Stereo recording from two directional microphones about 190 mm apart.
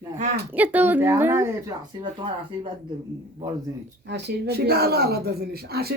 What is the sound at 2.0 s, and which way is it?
Speech, 30° right (ahead or behind).